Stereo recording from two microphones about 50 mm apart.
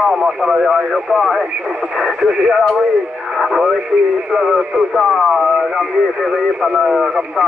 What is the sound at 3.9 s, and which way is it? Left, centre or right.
Speech, right.